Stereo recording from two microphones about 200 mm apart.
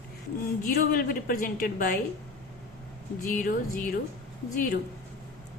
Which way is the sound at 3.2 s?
45° left (ahead or behind).